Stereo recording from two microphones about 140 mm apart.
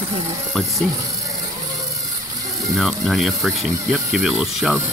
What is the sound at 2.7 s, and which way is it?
Speech, centre (ahead or behind).